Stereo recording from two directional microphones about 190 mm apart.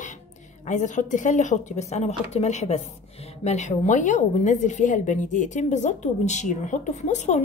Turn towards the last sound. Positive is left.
turn(degrees=35)  # may be behind; listen again after turning